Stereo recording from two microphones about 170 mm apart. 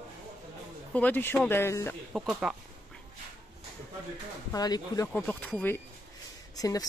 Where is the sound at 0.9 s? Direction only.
10° left (ahead or behind).